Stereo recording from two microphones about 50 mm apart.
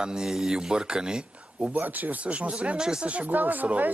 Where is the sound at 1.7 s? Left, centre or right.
Right.